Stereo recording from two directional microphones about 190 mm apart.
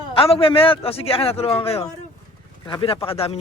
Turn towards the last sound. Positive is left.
turn(degrees=30)  # may be behind; listen again after turning